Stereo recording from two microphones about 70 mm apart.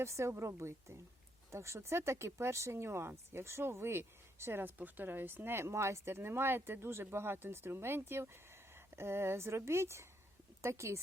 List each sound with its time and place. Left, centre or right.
0.0 s speech: right